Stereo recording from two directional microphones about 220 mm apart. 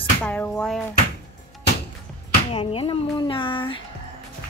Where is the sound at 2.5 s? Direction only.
25° left (ahead or behind).